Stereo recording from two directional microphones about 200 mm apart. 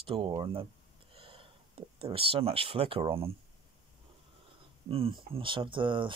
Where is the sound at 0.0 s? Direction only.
25° right (ahead or behind).